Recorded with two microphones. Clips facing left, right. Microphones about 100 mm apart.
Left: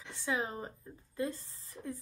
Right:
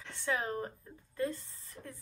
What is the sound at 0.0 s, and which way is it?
Speech, 15° left (ahead or behind).